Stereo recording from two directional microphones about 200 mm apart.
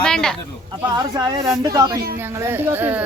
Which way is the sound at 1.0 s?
20° right (ahead or behind).